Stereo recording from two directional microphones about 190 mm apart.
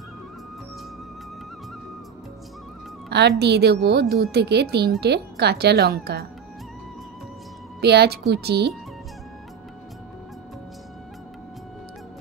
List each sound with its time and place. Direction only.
3.1 s a woman's voice: 60° right (ahead or behind)
7.8 s a woman's voice: 60° right (ahead or behind)